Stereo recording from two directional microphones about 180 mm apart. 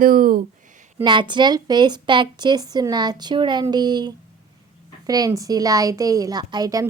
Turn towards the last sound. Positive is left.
turn(degrees=-20)  # may be behind; listen again after turning